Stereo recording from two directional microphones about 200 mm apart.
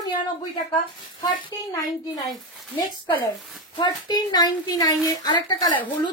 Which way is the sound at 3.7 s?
20° left (ahead or behind).